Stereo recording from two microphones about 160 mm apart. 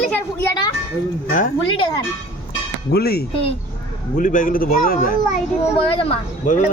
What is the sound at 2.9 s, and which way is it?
Speech, 75° left (ahead or behind).